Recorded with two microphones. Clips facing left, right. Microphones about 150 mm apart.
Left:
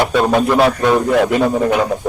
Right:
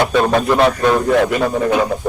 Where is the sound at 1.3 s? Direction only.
15° left (ahead or behind).